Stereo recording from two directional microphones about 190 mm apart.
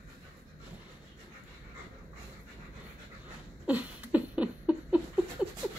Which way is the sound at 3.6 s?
10° right (ahead or behind).